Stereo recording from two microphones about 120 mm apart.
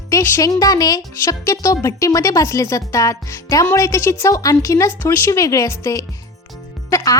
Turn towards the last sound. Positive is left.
turn(degrees=20)  # may be behind; listen again after turning